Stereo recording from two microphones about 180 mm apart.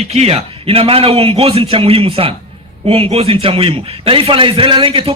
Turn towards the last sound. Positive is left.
turn(degrees=-30)  # may be behind; listen again after turning